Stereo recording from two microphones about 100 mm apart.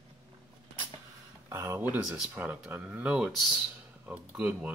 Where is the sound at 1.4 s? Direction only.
25° right (ahead or behind).